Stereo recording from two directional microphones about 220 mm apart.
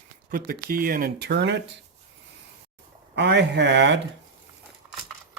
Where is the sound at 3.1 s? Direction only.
50° right (ahead or behind).